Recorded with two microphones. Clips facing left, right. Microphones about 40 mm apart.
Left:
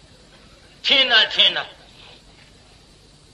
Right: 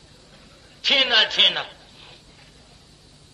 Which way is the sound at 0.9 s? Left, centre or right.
Left.